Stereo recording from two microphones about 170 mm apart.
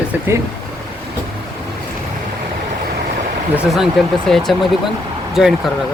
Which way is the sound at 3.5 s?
5° right (ahead or behind).